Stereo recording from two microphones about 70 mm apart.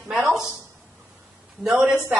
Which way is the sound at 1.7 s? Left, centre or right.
Right.